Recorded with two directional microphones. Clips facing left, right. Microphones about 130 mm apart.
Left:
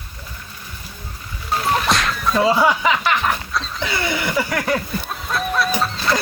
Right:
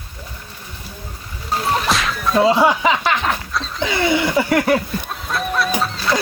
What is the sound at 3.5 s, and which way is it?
Wild animals, centre (ahead or behind).